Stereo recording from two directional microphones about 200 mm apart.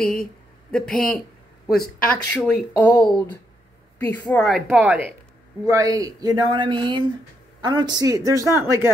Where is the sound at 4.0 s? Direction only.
10° left (ahead or behind).